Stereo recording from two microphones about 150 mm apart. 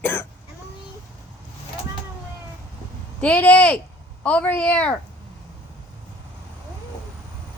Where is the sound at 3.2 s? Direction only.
10° left (ahead or behind).